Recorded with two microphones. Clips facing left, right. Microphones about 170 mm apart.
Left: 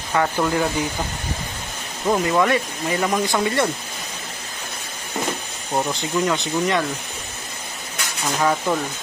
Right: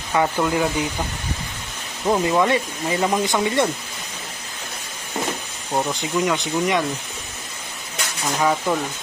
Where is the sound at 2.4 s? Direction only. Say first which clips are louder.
Even; 25° right (ahead or behind).